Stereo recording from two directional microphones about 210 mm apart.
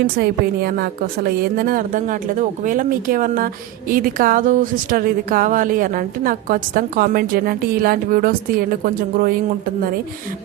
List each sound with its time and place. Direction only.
0.2 s a woman's voice: 45° right (ahead or behind)